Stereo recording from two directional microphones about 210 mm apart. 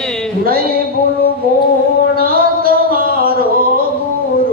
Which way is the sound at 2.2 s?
45° right (ahead or behind).